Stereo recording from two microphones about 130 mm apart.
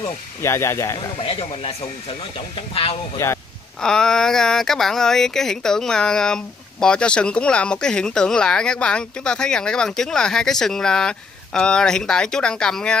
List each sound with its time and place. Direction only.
0.4 s speech: 20° left (ahead or behind)
0.9 s speech: 45° left (ahead or behind)
3.2 s speech: 20° left (ahead or behind)
3.8 s speech: 5° left (ahead or behind)